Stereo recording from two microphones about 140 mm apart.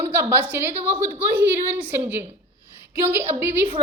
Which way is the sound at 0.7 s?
45° right (ahead or behind).